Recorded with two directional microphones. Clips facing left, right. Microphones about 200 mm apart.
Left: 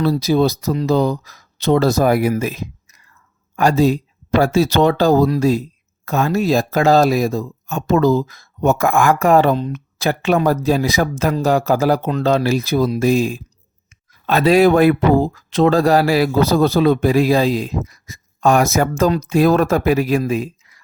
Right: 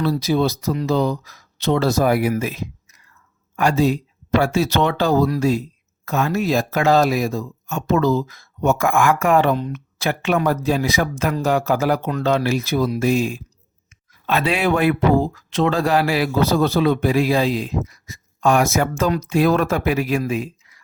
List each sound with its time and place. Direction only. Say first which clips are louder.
0.0 s speech: left 3 dB; 35° left (ahead or behind)
2.4 s a sound: left 2 dB; 40° left (ahead or behind)
3.5 s speech: left 3 dB; 40° left (ahead or behind)